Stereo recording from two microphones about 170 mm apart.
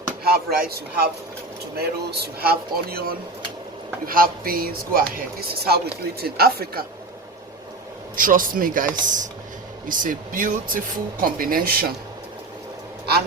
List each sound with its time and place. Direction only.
0.3 s speech: 65° right (ahead or behind)
8.1 s speech: 55° right (ahead or behind)